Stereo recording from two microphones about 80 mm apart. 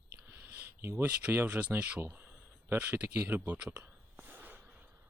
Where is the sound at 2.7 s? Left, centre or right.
Right.